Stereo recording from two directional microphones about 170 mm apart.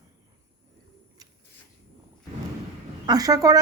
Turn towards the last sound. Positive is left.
turn(degrees=-20)  # may be behind; listen again after turning